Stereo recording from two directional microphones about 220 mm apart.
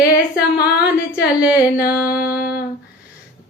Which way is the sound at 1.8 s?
40° left (ahead or behind).